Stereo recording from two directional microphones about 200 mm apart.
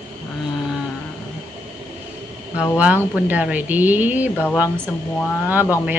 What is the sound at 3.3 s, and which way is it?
Speech, 5° right (ahead or behind).